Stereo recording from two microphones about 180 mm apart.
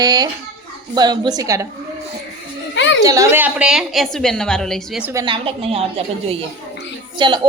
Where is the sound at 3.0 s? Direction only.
20° right (ahead or behind); by 5.0 s centre (ahead or behind).